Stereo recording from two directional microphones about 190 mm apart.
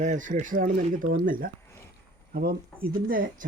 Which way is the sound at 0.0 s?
40° right (ahead or behind).